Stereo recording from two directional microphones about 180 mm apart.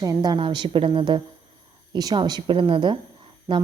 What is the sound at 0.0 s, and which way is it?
A woman's voice, 20° right (ahead or behind).